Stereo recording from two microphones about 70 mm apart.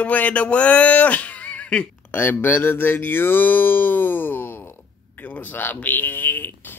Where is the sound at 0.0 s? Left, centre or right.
Left.